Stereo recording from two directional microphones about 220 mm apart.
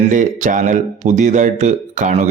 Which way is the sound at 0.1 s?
35° right (ahead or behind).